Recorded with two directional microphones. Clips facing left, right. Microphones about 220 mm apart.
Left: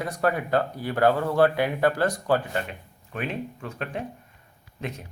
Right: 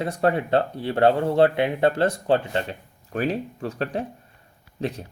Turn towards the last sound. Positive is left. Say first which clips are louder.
# right 6 dB
turn(degrees=-35)  # may be behind; listen again after turning